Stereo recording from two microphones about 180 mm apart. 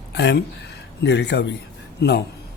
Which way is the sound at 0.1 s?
70° left (ahead or behind).